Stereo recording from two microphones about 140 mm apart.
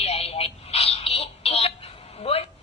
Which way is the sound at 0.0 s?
45° left (ahead or behind).